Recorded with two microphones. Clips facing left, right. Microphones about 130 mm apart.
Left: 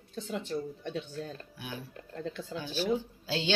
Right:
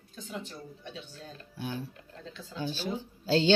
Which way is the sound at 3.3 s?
35° right (ahead or behind).